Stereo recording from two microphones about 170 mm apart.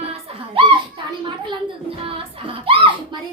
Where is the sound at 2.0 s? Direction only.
30° right (ahead or behind).